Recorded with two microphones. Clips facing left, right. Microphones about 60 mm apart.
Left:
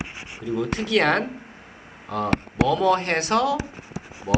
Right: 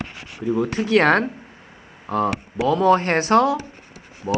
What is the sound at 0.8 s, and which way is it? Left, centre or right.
Speech, right.